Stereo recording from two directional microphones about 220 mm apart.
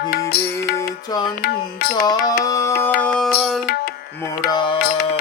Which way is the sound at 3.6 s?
45° left (ahead or behind).